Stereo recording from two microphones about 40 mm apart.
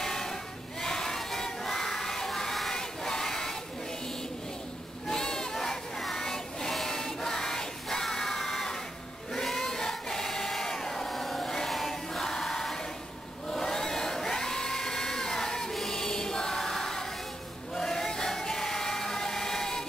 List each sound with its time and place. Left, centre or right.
0.0 s a sound: centre
2.7 s choir: centre
5.1 s child singing: centre
9.3 s choir: centre
11.1 s a sound: centre
11.4 s chant: centre
11.7 s choir: centre
13.5 s crowd: centre
15.7 s choir: centre
17.9 s music: centre